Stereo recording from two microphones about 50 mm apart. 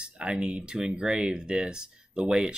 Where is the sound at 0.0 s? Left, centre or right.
Centre.